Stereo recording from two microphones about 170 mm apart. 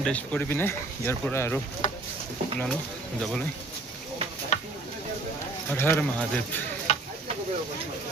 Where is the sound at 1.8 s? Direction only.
45° left (ahead or behind).